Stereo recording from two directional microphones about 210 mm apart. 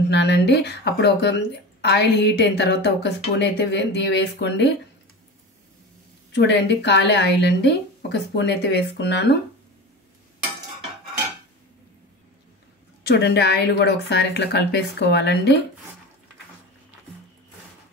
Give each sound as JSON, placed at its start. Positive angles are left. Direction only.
{"t": 0.1, "sound": "a woman's voice", "side_deg": 55}
{"t": 6.3, "sound": "a woman's voice", "side_deg": 55}
{"t": 13.1, "sound": "a woman's voice", "side_deg": 50}